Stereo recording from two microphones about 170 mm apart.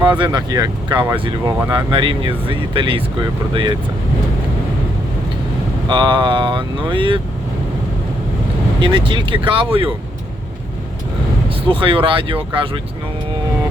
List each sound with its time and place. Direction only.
0.2 s speech: 25° right (ahead or behind)
5.9 s speech: 25° right (ahead or behind)
8.8 s speech: 30° right (ahead or behind)
11.4 s speech: 30° right (ahead or behind)